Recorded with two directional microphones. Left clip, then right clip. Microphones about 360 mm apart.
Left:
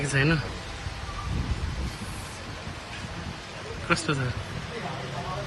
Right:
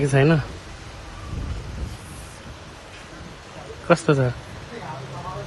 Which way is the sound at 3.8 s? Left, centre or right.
Centre.